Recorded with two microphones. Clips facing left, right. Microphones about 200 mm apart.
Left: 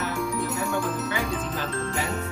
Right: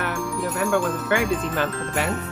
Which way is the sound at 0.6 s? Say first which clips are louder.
Right 5 dB; 75° right (ahead or behind).